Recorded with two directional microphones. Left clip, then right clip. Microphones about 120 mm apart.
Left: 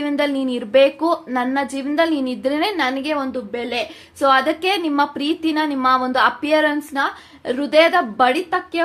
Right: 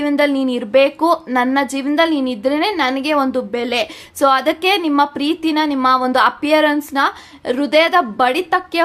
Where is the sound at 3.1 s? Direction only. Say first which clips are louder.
Right 6 dB; 45° right (ahead or behind).